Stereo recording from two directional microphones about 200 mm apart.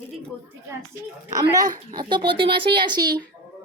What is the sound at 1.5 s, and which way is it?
Speech, 20° right (ahead or behind).